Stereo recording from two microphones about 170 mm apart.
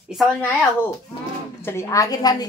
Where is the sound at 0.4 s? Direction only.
10° left (ahead or behind).